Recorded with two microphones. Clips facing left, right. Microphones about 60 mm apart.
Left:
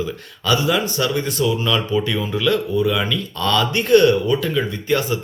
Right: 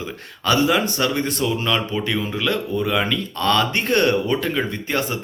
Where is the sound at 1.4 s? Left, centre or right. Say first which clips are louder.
Left 2 dB; right.